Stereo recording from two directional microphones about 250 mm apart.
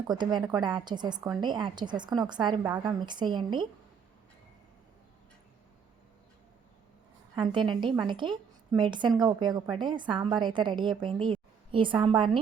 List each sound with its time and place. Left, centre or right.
0.1 s a woman's voice: centre
7.3 s a woman's voice: centre